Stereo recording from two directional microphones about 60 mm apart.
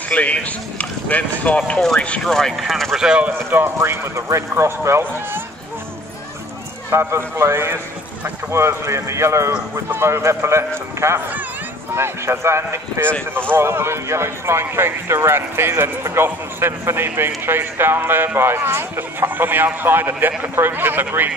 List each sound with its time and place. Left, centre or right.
0.1 s speech: left
2.2 s speech: centre
3.0 s speech: centre
3.3 s speech: right
6.9 s speech: right